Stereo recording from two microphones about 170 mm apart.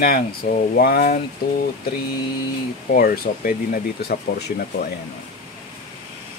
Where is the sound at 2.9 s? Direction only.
60° left (ahead or behind).